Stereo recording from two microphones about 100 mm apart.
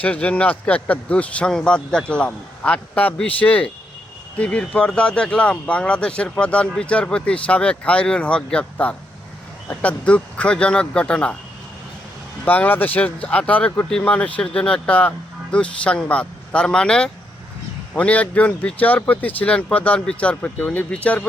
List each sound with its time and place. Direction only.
0.0 s speech: 15° left (ahead or behind)
12.5 s speech: 20° left (ahead or behind)